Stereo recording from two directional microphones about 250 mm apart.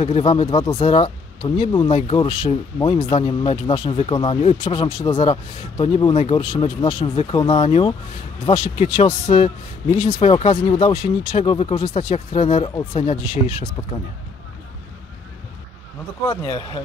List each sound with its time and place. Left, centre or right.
0.0 s speech: left
16.3 s speech: centre